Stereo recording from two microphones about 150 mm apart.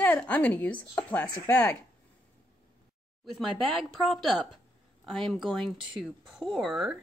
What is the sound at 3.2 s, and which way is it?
Speech, centre (ahead or behind).